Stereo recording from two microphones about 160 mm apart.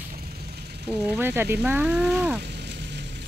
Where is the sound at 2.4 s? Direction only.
90° right.